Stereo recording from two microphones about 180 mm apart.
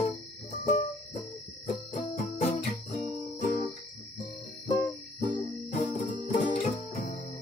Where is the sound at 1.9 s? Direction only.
35° left (ahead or behind).